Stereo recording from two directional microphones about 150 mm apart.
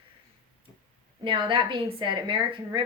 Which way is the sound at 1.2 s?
35° right (ahead or behind).